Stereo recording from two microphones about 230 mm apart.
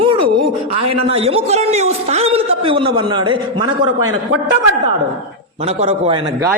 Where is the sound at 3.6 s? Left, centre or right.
Right.